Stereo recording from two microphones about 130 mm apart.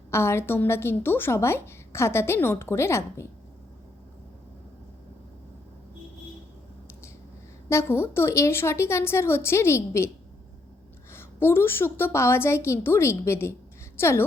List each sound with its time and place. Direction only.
0.1 s a woman's voice: 20° left (ahead or behind)
7.7 s a woman's voice: 20° left (ahead or behind)
11.1 s a woman's voice: 20° left (ahead or behind)